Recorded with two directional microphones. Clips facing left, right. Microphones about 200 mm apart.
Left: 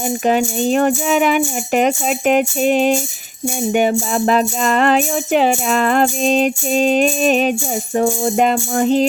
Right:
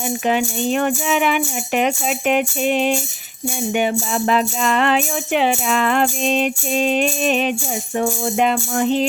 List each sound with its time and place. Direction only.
0.3 s speech: 40° left (ahead or behind)
3.7 s music: 40° left (ahead or behind)